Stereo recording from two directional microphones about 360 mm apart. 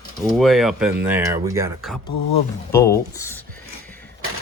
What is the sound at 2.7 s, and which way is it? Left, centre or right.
Speech, centre.